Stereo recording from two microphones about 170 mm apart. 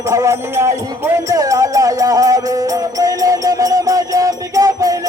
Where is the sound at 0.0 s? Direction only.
15° right (ahead or behind).